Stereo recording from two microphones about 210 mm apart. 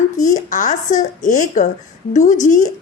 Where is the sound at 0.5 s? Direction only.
35° left (ahead or behind).